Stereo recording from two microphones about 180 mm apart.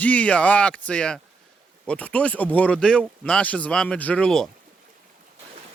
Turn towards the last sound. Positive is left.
turn(degrees=5)  # may be behind; listen again after turning